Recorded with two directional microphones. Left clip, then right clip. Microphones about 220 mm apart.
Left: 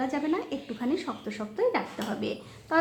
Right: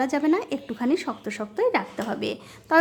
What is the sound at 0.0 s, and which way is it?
A woman's voice, 30° right (ahead or behind).